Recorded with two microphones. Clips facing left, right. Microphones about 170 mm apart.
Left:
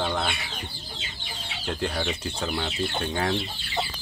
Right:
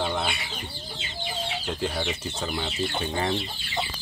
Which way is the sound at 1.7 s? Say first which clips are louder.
Left 2 dB; centre (ahead or behind).